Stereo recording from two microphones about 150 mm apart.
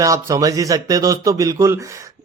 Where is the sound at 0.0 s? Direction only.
20° right (ahead or behind).